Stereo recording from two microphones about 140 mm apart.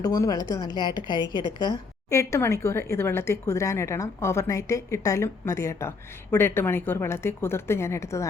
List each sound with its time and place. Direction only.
0.0 s a woman's voice: 25° left (ahead or behind)